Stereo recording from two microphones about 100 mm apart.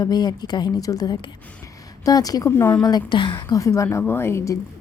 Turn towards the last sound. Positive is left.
turn(degrees=30)  # may be behind; listen again after turning